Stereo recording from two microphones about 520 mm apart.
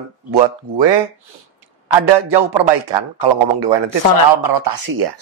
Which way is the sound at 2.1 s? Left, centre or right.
Right.